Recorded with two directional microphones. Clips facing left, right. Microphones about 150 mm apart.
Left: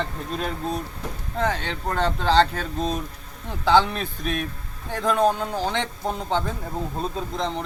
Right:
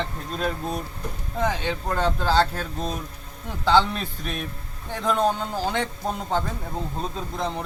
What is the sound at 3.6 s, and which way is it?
Speech, 10° left (ahead or behind).